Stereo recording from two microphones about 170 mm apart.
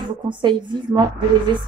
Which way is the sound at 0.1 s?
25° right (ahead or behind).